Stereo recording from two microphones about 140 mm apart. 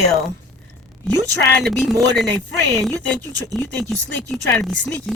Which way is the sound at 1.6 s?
Centre (ahead or behind).